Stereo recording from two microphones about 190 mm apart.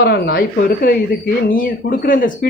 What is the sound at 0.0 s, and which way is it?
Speech, 55° left (ahead or behind).